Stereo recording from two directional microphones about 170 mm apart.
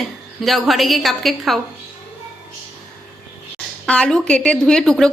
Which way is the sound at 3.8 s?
5° left (ahead or behind).